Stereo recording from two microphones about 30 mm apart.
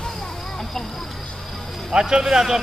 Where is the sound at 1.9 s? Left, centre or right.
Right.